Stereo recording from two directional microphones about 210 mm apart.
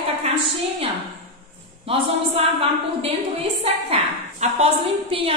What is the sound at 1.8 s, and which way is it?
A woman's voice, 25° right (ahead or behind).